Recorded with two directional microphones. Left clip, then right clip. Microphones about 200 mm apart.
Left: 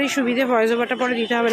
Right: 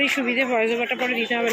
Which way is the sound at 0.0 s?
20° left (ahead or behind).